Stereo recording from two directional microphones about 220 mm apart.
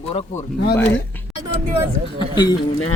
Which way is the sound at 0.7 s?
10° left (ahead or behind).